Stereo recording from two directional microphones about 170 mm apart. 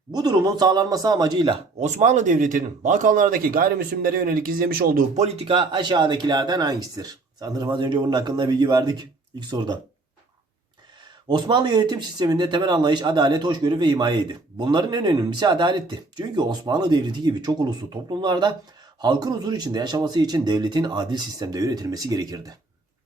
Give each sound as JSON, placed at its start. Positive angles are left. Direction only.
{"t": 0.1, "sound": "speech", "side_deg": -25}
{"t": 1.8, "sound": "speech", "side_deg": -45}
{"t": 11.3, "sound": "speech", "side_deg": -25}